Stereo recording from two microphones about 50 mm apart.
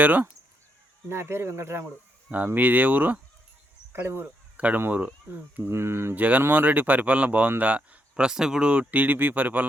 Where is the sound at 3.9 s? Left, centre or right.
Right.